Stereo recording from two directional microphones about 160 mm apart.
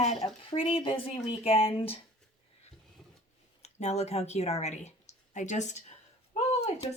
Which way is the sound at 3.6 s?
40° left (ahead or behind).